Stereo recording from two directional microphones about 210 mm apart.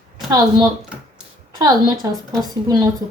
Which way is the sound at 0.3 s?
20° right (ahead or behind).